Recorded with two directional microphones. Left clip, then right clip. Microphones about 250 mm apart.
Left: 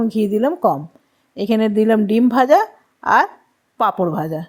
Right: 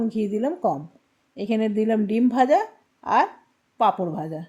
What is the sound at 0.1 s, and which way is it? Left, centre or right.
A woman's voice, centre.